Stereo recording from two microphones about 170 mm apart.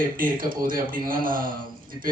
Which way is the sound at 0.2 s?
55° right (ahead or behind).